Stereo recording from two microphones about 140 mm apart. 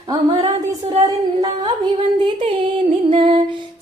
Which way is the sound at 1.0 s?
25° right (ahead or behind).